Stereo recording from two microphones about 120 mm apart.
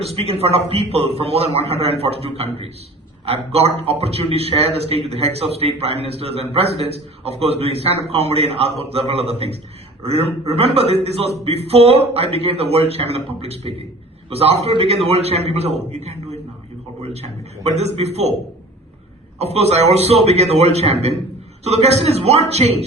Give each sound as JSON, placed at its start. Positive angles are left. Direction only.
{"t": 0.0, "sound": "a man's voice", "side_deg": -55}
{"t": 19.4, "sound": "a man's voice", "side_deg": -60}